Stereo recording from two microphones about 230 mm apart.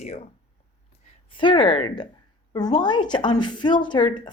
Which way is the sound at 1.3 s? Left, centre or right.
Left.